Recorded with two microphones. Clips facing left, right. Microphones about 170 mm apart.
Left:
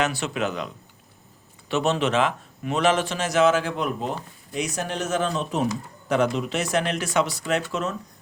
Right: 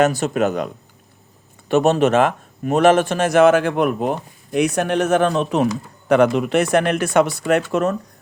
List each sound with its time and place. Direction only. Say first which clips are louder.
0.0 s speech: right 8 dB; 45° right (ahead or behind)